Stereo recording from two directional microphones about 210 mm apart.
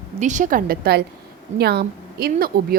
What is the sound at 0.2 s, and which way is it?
A woman's voice, 35° right (ahead or behind).